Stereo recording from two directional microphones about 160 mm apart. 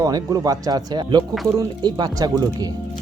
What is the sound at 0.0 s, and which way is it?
Speech, 25° right (ahead or behind).